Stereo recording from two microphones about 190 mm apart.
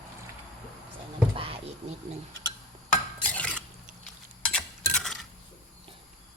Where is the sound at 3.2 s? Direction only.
5° left (ahead or behind).